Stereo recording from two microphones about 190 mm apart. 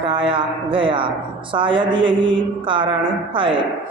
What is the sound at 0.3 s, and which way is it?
Speech, 25° right (ahead or behind).